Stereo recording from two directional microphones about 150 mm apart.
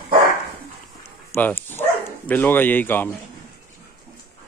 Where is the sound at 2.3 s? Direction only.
10° left (ahead or behind).